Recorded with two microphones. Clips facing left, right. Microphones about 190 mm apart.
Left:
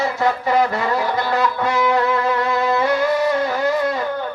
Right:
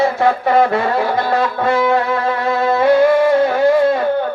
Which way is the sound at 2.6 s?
30° right (ahead or behind).